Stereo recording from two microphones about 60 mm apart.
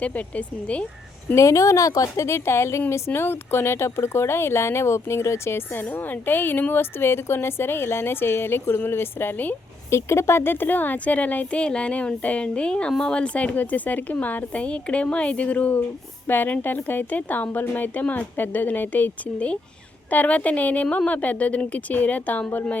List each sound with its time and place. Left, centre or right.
0.0 s a woman's voice: left
1.4 s a woman's voice: left
5.9 s speech: left
9.9 s a woman's voice: left